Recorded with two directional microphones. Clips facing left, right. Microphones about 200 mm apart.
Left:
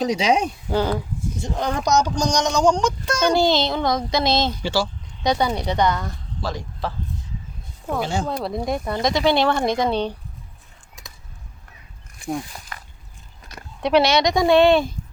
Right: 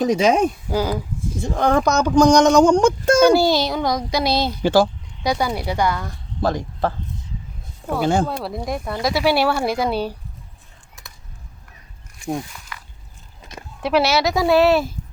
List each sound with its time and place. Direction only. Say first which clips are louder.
0.0 s speech: right 3 dB; 50° right (ahead or behind)
0.7 s speech: even; 5° right (ahead or behind)
1.4 s speech: right 7 dB; 50° right (ahead or behind)
3.3 s speech: right 2 dB; 10° right (ahead or behind)
4.6 s speech: right 7 dB; 55° right (ahead or behind)
5.2 s speech: left 1 dB; 5° right (ahead or behind)
6.4 s speech: right 7 dB; 50° right (ahead or behind)
8.0 s speech: right 9 dB; 55° right (ahead or behind)
8.4 s speech: left 2 dB; centre (ahead or behind)
12.5 s a sound: left 1 dB; 35° left (ahead or behind)
13.8 s speech: left 1 dB; 5° right (ahead or behind)